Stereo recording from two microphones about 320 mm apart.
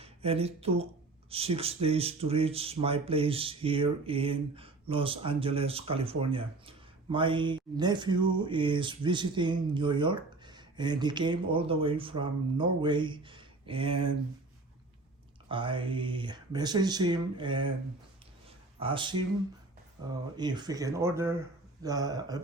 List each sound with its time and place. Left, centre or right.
0.0 s speech: centre
15.4 s speech: centre
18.4 s a sound: centre
20.3 s speech: centre